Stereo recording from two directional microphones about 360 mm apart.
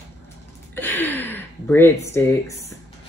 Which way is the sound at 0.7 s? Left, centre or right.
Centre.